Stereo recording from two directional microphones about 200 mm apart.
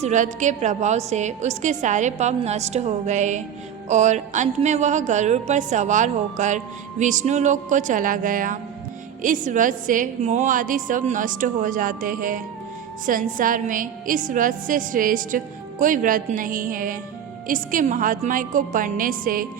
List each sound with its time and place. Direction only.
0.0 s a woman's voice: 35° right (ahead or behind)